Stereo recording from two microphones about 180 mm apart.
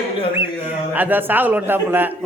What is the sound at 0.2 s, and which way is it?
Speech, 30° left (ahead or behind).